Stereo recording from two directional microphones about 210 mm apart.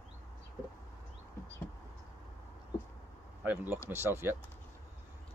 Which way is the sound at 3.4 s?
10° right (ahead or behind).